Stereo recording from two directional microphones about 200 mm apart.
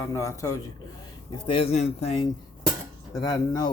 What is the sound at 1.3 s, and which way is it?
Speech, 25° left (ahead or behind).